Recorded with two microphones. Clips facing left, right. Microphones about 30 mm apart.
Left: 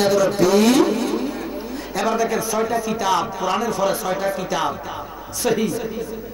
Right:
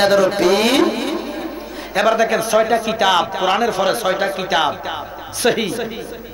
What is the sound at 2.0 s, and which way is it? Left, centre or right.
A man's voice, right.